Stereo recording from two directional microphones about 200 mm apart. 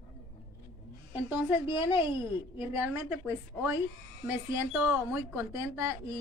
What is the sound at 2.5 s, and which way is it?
A woman's voice, 10° right (ahead or behind).